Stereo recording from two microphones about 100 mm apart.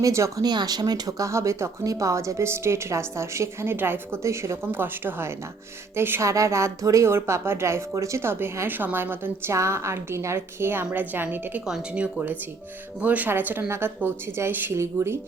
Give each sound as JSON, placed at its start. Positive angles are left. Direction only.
{"t": 0.0, "sound": "speech", "side_deg": -30}
{"t": 0.4, "sound": "a woman's voice", "side_deg": -45}
{"t": 11.6, "sound": "speech", "side_deg": -5}
{"t": 13.0, "sound": "a woman's voice", "side_deg": -15}